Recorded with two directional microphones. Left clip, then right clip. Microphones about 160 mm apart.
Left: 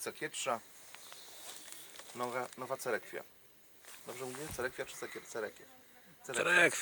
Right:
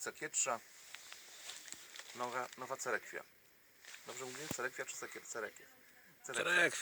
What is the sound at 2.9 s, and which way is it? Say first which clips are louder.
Speech: left 2 dB; 20° left (ahead or behind).